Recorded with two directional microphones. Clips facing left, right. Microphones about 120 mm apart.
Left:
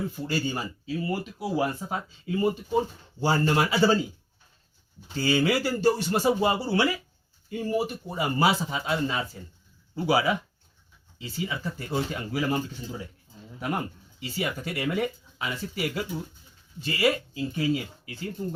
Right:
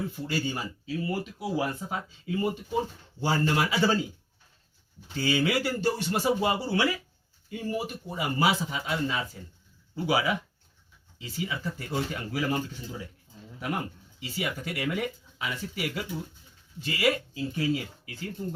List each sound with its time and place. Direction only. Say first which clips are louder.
0.3 s speech: left 2 dB; 35° left (ahead or behind)
5.1 s speech: left 2 dB; 35° left (ahead or behind)
14.2 s speech: left 2 dB; 35° left (ahead or behind)